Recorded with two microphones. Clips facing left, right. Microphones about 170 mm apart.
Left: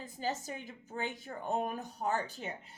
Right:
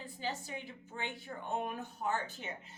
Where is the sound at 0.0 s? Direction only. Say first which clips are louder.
Left 3 dB; 40° left (ahead or behind).